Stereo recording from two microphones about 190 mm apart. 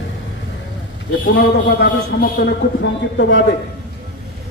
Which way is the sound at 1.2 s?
60° left (ahead or behind).